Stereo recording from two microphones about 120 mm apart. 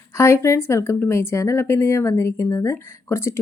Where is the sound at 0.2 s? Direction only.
25° left (ahead or behind).